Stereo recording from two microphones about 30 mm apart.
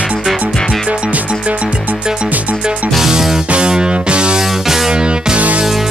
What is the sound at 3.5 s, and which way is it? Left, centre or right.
Music, right.